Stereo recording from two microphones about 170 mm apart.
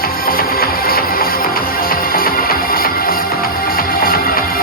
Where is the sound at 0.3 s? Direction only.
60° left (ahead or behind).